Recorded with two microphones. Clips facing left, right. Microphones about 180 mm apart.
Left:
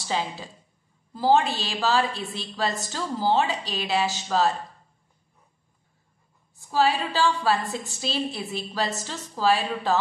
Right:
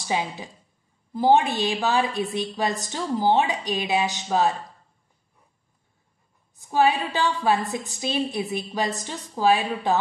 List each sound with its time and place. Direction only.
0.0 s a woman's voice: 15° right (ahead or behind)
6.5 s a woman's voice: 20° right (ahead or behind)